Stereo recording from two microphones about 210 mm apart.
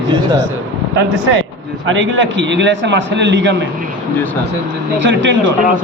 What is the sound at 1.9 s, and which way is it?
A man's voice, 65° right (ahead or behind).